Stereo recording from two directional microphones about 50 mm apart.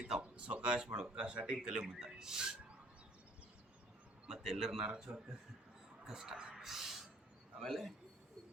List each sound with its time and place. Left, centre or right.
0.2 s speech: right
4.3 s speech: centre
6.6 s a sound: centre
7.6 s a man's voice: centre